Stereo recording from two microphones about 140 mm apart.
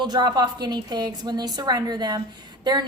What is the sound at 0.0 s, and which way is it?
A woman's voice, 30° right (ahead or behind).